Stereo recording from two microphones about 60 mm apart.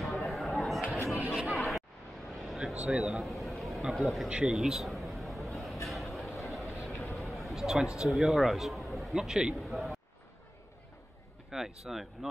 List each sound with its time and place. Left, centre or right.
0.0 s a sound: centre
1.5 s chatter: centre
2.3 s vehicle: centre
2.7 s speech: right
3.0 s speech: centre
4.3 s a sound: centre
5.9 s vehicle: centre
6.9 s vehicle: left
7.2 s a sound: centre
8.1 s a man's voice: centre
11.5 s speech: centre